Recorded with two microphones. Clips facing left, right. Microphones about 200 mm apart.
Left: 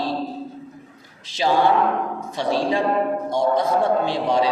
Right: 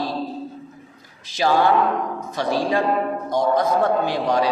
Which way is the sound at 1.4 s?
25° left (ahead or behind).